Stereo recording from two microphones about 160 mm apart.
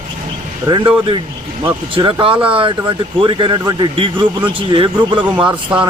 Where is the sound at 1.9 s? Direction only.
30° right (ahead or behind).